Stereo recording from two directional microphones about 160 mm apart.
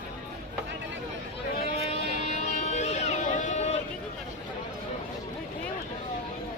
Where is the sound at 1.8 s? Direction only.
45° left (ahead or behind).